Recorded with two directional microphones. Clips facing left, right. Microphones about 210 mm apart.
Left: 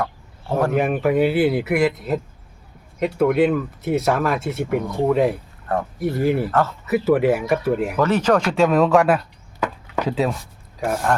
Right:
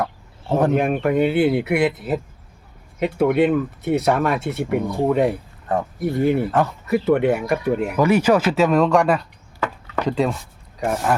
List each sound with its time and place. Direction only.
0.0 s a sound: 20° right (ahead or behind)
0.7 s speech: centre (ahead or behind)
6.5 s speech: 15° right (ahead or behind)
6.8 s speech: 5° left (ahead or behind)
7.9 s speech: 10° right (ahead or behind)